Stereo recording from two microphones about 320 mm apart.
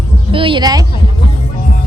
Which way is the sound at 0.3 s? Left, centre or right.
Centre.